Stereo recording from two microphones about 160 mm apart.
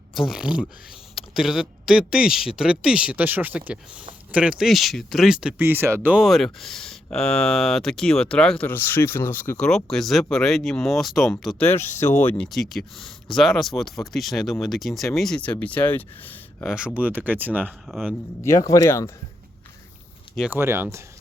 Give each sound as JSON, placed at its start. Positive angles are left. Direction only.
{"t": 0.1, "sound": "speech", "side_deg": 0}
{"t": 11.6, "sound": "speech", "side_deg": 15}
{"t": 13.3, "sound": "speech", "side_deg": 0}
{"t": 16.6, "sound": "speech", "side_deg": -5}
{"t": 17.7, "sound": "speech", "side_deg": 0}
{"t": 18.4, "sound": "speech", "side_deg": 20}
{"t": 20.3, "sound": "speech", "side_deg": -5}
{"t": 20.6, "sound": "speech", "side_deg": -15}